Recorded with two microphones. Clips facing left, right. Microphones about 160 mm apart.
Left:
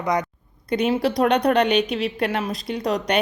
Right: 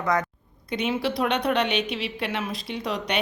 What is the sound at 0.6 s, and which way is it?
A woman's voice, 40° left (ahead or behind).